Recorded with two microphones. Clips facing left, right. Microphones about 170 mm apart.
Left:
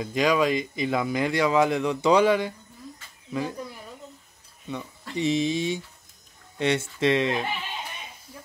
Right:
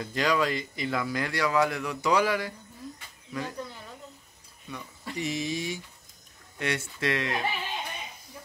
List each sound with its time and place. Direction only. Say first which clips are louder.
0.0 s speech: left 4 dB; 15° left (ahead or behind)